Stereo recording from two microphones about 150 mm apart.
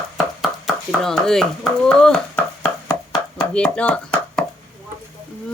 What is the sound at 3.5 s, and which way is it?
Speech, 10° left (ahead or behind).